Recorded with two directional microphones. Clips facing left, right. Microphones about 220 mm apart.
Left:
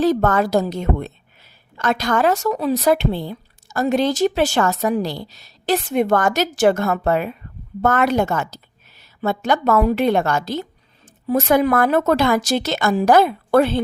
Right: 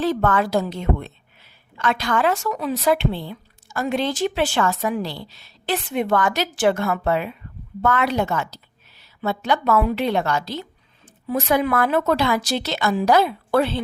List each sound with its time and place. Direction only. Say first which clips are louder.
0.0 s a woman's voice: left 4 dB; 40° left (ahead or behind)